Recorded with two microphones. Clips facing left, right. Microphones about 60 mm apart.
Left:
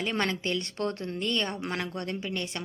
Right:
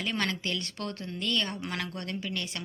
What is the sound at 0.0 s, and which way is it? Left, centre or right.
A woman's voice, left.